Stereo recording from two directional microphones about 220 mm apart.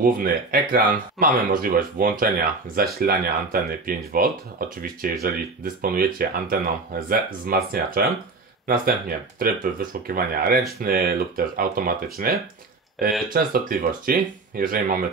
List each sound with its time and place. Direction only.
0.0 s speech: 40° right (ahead or behind)